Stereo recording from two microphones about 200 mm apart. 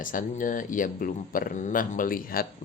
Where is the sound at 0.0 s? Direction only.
40° left (ahead or behind).